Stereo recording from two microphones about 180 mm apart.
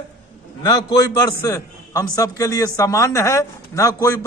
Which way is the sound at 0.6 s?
25° left (ahead or behind).